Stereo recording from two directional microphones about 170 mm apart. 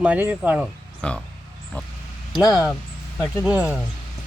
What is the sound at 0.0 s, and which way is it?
Speech, 10° right (ahead or behind).